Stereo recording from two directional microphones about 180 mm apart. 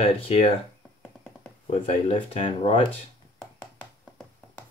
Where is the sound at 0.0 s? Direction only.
35° left (ahead or behind).